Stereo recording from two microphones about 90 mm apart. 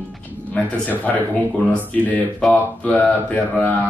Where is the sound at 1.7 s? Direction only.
15° left (ahead or behind).